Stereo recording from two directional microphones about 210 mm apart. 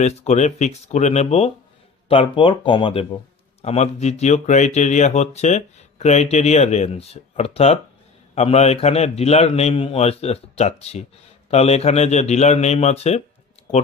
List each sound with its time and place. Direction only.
0.0 s a man's voice: 30° left (ahead or behind)